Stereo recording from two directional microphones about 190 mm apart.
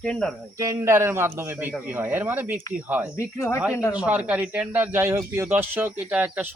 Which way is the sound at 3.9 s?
5° right (ahead or behind).